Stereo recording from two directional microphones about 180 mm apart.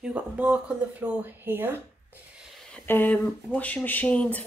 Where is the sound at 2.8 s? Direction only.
10° left (ahead or behind).